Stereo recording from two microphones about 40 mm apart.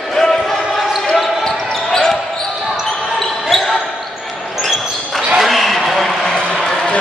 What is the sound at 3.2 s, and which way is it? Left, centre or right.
Basketball bounce, centre.